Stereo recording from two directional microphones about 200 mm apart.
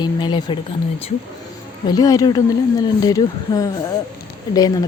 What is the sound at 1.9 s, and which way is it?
Speech, 20° left (ahead or behind).